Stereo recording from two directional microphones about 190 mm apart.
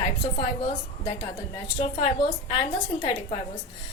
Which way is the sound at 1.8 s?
25° left (ahead or behind).